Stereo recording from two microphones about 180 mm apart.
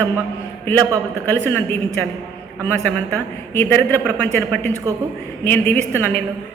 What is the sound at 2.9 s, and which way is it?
A man's voice, 10° left (ahead or behind).